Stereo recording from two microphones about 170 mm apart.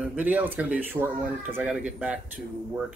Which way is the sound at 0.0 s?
10° right (ahead or behind).